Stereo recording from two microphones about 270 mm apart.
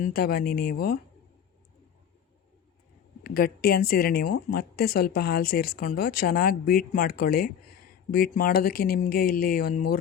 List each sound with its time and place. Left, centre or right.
0.0 s speech: left
3.2 s speech: left